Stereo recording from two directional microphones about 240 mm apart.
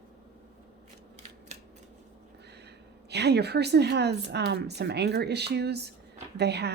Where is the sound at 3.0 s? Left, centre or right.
Right.